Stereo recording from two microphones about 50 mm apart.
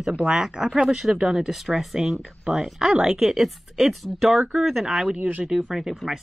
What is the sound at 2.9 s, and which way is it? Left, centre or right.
Speech, right.